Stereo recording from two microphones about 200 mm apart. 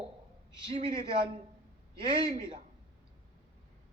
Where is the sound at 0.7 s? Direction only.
25° right (ahead or behind).